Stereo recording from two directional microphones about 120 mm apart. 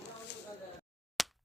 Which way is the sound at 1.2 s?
Centre (ahead or behind).